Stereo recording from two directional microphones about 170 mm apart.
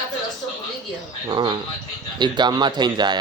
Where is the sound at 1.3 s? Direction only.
25° right (ahead or behind).